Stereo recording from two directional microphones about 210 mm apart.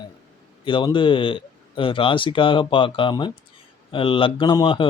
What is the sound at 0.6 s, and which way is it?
Speech, 25° left (ahead or behind).